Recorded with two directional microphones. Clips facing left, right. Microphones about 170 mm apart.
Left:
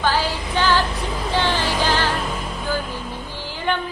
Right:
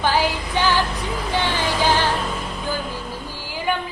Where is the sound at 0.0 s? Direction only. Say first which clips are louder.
Right 1 dB; 15° right (ahead or behind).